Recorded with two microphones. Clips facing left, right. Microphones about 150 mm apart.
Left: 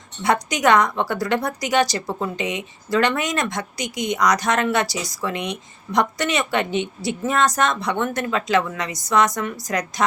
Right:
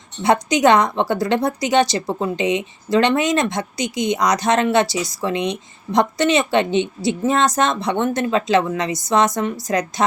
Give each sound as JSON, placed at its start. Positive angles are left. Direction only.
{"t": 0.2, "sound": "a woman's voice", "side_deg": -25}